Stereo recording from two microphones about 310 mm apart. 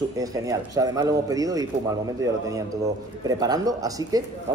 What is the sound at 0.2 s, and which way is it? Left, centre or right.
Speech, centre.